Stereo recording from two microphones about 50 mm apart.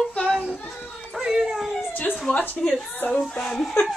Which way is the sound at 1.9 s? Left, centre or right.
Left.